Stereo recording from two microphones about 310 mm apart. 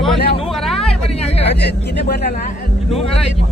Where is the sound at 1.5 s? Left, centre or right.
Left.